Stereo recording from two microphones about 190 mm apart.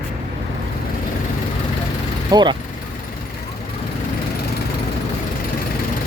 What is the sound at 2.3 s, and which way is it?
Speech, 25° right (ahead or behind).